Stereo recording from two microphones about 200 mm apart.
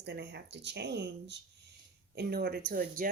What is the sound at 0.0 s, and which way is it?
A woman's voice, 60° right (ahead or behind).